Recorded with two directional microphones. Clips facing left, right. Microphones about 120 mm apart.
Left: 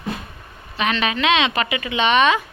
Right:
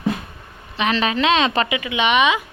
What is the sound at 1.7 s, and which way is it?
Speech, 10° right (ahead or behind).